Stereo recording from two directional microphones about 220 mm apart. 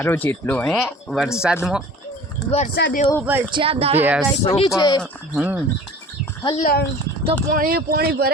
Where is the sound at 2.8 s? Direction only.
50° left (ahead or behind).